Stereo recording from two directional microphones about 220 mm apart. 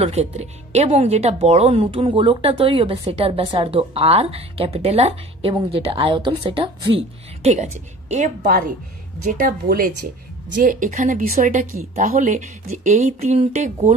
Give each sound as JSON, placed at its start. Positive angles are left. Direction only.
{"t": 0.0, "sound": "a woman's voice", "side_deg": -30}
{"t": 8.4, "sound": "a woman's voice", "side_deg": -45}